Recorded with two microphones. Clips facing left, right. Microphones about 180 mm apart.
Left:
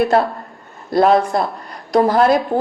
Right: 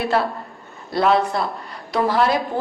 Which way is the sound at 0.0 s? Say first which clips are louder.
Left 5 dB; 45° left (ahead or behind).